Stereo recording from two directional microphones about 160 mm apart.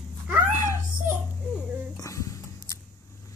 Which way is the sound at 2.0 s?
20° left (ahead or behind).